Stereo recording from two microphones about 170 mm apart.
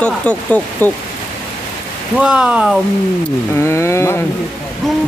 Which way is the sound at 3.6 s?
15° left (ahead or behind).